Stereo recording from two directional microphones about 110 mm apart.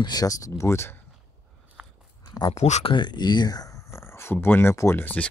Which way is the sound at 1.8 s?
15° right (ahead or behind).